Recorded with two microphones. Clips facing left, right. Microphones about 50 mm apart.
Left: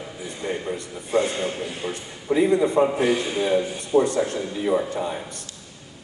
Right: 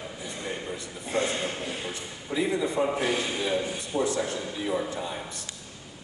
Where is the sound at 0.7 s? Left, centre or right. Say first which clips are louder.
Left 6 dB; centre.